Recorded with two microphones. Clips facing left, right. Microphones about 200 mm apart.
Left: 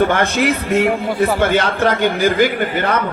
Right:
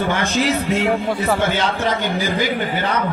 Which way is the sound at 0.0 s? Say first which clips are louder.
Left 4 dB; 55° left (ahead or behind).